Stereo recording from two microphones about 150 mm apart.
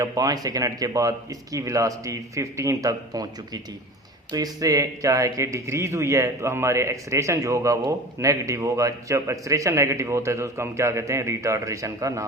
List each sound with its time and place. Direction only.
0.0 s speech: 25° right (ahead or behind)